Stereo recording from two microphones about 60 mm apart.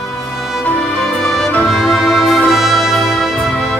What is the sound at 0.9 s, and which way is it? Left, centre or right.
Music, centre.